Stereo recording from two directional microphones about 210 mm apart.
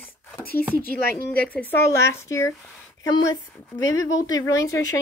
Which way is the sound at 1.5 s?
10° left (ahead or behind).